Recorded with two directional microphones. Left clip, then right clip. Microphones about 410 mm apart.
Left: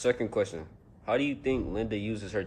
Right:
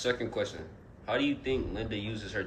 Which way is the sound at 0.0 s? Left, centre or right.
Centre.